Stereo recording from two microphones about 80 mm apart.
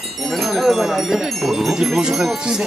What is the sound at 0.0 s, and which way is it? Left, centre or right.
Wind chime, centre.